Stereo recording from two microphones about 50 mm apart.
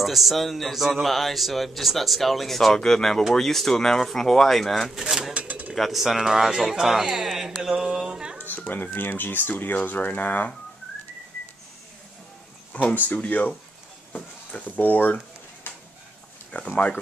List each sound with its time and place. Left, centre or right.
0.0 s a man's voice: centre
5.3 s a sound: right
5.8 s speech: centre
8.6 s speech: left
12.9 s speech: left
15.7 s a sound: left
16.5 s speech: left